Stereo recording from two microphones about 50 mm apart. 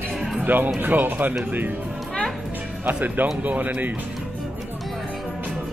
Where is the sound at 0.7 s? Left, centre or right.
Right.